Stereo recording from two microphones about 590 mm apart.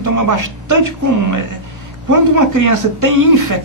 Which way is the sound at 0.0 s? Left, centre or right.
Right.